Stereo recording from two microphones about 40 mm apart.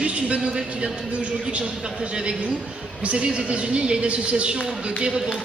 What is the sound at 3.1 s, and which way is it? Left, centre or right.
A man's voice, right.